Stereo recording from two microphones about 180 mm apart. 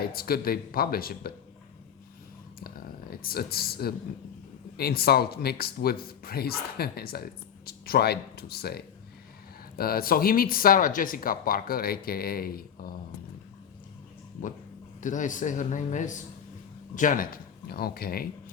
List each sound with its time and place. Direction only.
0.0 s speech: 55° left (ahead or behind)
2.6 s speech: 55° left (ahead or behind)
15.0 s a man's voice: 45° left (ahead or behind)